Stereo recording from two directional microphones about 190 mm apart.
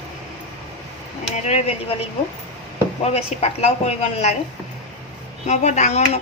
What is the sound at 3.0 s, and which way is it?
Speech, 35° left (ahead or behind).